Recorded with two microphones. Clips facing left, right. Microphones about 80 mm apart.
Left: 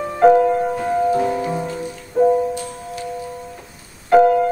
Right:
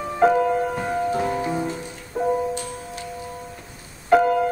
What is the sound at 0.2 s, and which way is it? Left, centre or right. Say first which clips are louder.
Music: left 5 dB; centre.